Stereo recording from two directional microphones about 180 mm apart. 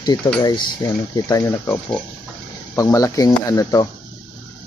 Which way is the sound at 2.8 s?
20° left (ahead or behind).